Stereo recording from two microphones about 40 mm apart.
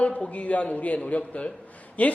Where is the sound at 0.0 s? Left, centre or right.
Left.